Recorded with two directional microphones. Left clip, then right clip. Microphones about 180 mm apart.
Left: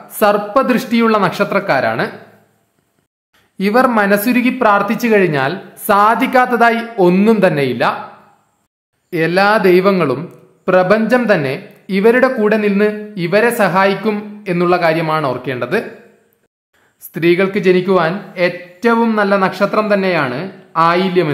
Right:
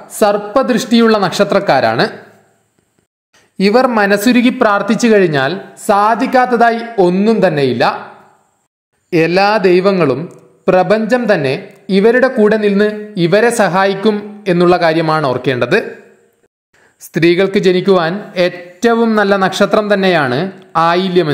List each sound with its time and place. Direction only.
0.1 s speech: 15° right (ahead or behind)
3.3 s a man's voice: 20° right (ahead or behind)
9.1 s a man's voice: 25° right (ahead or behind)
17.1 s a man's voice: 25° right (ahead or behind)